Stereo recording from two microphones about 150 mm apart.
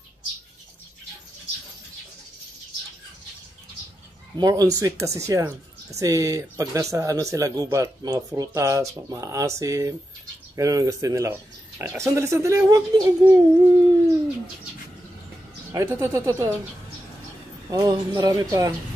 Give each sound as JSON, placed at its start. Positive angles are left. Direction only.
{"t": 4.4, "sound": "a child's voice", "side_deg": -25}
{"t": 15.7, "sound": "speech", "side_deg": -20}
{"t": 17.6, "sound": "speech", "side_deg": -25}